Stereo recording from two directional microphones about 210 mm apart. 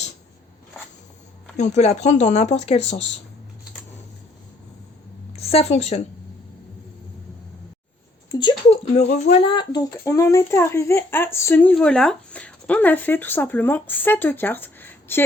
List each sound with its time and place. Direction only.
1.5 s speech: 35° left (ahead or behind)
5.4 s speech: 30° left (ahead or behind)
8.3 s speech: 20° left (ahead or behind)